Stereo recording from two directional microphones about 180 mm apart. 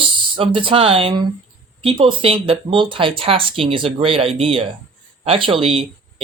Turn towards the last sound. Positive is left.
turn(degrees=-30)  # may be behind; listen again after turning